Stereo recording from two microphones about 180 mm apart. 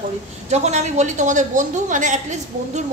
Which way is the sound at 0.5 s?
40° right (ahead or behind).